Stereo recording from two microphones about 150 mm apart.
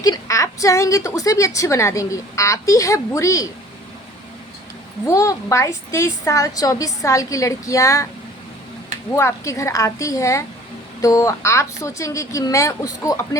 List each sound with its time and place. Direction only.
0.0 s a woman's voice: 25° left (ahead or behind)
5.0 s a woman's voice: 20° left (ahead or behind)
9.1 s a woman's voice: 20° left (ahead or behind)